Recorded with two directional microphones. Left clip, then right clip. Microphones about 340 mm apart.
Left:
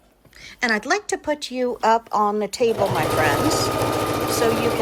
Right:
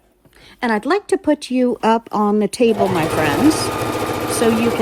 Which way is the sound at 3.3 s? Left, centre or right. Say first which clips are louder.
Right 4 dB; centre.